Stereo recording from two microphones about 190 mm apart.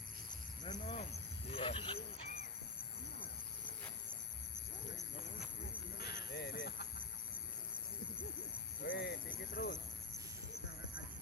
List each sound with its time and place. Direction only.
0.6 s speech: 25° left (ahead or behind)
6.0 s a sound: 60° left (ahead or behind)
8.9 s cricket: 60° left (ahead or behind)